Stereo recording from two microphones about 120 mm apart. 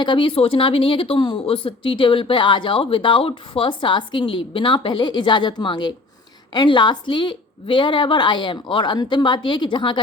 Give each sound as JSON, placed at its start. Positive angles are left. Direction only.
{"t": 0.0, "sound": "a woman's voice", "side_deg": 40}